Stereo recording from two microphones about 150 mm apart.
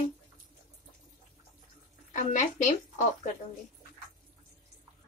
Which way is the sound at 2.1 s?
55° left (ahead or behind).